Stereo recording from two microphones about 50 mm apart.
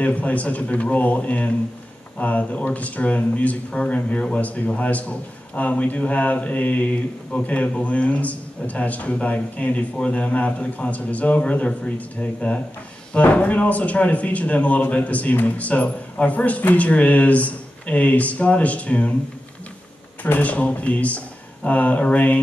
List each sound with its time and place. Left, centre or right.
0.0 s speech: left
5.5 s mantra: left
7.3 s speech: left
20.3 s speech: left
21.6 s mantra: left